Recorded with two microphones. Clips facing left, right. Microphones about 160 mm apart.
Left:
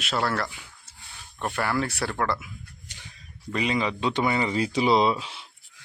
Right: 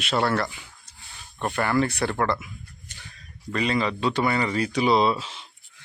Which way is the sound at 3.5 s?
15° left (ahead or behind).